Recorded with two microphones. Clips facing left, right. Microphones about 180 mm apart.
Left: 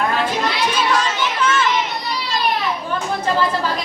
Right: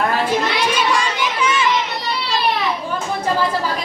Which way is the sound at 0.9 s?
10° right (ahead or behind).